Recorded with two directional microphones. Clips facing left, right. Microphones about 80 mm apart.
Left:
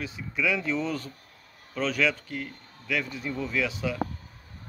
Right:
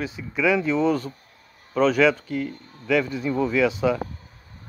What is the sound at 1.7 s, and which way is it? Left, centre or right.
Speech, right.